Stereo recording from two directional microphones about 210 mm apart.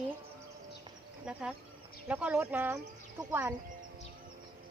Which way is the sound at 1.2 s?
5° right (ahead or behind).